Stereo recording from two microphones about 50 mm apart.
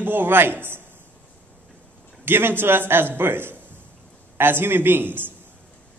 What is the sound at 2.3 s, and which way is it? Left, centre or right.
A man's voice, right.